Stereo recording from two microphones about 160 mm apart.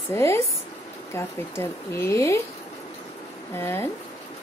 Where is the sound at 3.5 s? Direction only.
15° left (ahead or behind).